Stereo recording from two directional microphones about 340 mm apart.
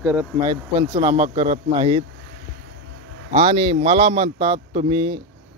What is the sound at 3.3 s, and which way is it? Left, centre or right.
Speech, centre.